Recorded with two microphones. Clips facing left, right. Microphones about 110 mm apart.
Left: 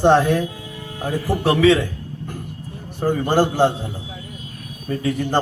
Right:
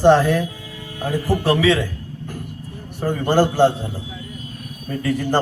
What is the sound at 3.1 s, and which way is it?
Speech, 15° left (ahead or behind).